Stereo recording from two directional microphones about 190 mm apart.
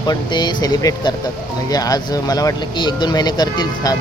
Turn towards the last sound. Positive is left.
turn(degrees=20)  # may be behind; listen again after turning